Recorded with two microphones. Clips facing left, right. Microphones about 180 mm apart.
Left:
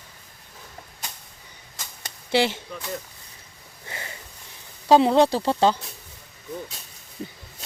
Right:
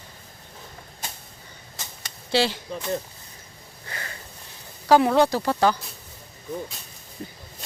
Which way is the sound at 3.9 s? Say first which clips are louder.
Even; 20° left (ahead or behind).